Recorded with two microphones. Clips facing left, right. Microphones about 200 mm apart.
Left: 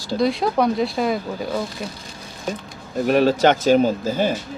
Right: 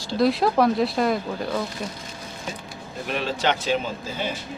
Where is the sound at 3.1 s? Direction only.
45° left (ahead or behind).